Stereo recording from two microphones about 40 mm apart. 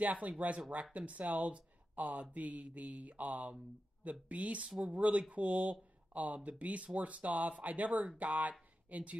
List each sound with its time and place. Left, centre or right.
0.0 s speech: right